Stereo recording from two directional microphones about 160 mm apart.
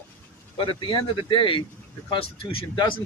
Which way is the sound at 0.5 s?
30° left (ahead or behind).